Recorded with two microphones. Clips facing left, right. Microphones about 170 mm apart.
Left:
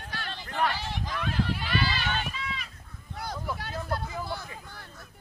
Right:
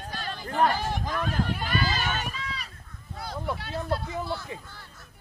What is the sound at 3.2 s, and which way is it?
Vehicle, 45° left (ahead or behind).